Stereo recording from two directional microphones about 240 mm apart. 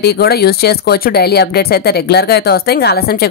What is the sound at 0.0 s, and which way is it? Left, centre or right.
Speech, left.